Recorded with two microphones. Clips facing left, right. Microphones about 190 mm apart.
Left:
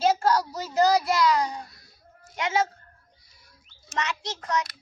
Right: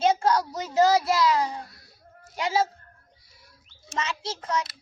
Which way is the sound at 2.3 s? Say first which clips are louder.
Right 1 dB; 35° right (ahead or behind).